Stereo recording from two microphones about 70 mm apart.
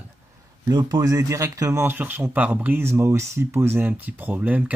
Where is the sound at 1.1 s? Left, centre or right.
Right.